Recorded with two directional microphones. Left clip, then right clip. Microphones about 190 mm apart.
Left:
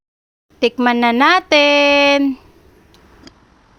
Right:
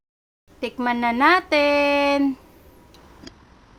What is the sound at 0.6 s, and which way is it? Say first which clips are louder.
Speech: left 8 dB; 40° left (ahead or behind).